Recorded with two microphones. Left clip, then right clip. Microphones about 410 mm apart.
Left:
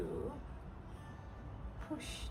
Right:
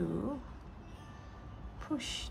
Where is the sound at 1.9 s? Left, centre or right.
Centre.